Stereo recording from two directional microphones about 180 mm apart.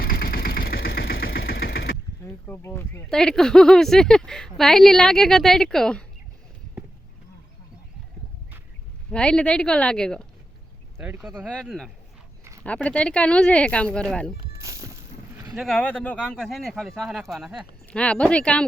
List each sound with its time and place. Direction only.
0.0 s engine: 55° left (ahead or behind)
2.5 s speech: 10° left (ahead or behind)
9.1 s speech: 5° left (ahead or behind)
10.9 s speech: 10° right (ahead or behind)
14.6 s music: 15° right (ahead or behind)
15.5 s speech: 5° left (ahead or behind)